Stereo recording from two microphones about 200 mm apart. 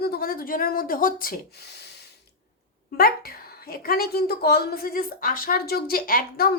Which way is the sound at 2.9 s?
50° left (ahead or behind).